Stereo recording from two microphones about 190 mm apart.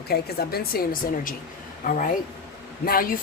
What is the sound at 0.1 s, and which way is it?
A woman's voice, 55° left (ahead or behind).